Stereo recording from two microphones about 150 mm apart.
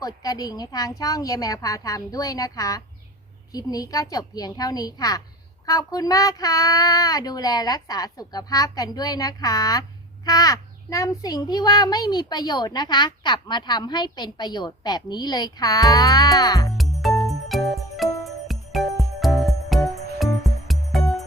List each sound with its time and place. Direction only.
0.0 s a child's voice: 25° left (ahead or behind)
16.7 s music: centre (ahead or behind)